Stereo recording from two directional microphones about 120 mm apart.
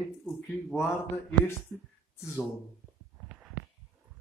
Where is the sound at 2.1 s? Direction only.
25° left (ahead or behind).